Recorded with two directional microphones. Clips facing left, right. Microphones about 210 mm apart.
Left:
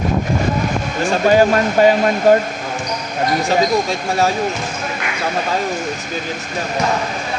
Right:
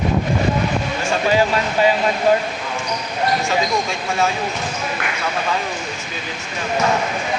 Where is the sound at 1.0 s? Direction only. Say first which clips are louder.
Left 6 dB; 45° left (ahead or behind).